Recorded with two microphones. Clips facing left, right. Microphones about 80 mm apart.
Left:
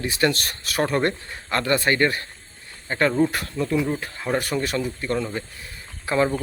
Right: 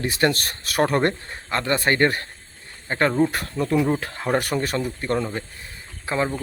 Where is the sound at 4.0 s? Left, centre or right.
Right.